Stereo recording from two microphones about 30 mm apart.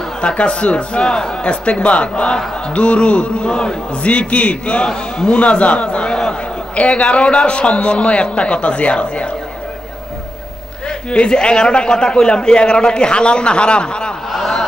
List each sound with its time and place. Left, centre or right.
0.2 s a man's voice: left
1.4 s a man's voice: left
4.0 s a man's voice: left
11.1 s a man's voice: left
11.3 s a man's voice: left
14.3 s a sound: centre